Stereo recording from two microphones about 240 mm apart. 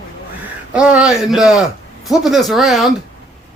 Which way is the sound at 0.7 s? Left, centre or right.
Centre.